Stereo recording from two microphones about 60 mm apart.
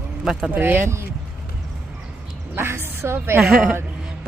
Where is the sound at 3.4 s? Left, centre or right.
Centre.